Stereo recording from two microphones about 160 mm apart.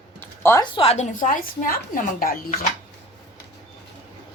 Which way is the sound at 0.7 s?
40° left (ahead or behind).